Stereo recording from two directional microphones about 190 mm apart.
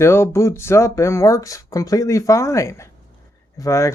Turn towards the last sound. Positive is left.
turn(degrees=15)  # may be behind; listen again after turning